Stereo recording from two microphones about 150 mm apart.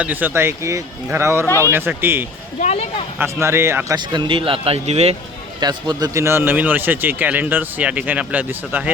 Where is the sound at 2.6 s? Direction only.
50° left (ahead or behind).